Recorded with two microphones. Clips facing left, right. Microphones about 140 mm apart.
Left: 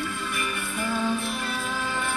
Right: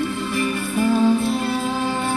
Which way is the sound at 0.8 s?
30° right (ahead or behind).